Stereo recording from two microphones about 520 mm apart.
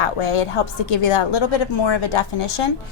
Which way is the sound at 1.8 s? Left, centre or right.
Left.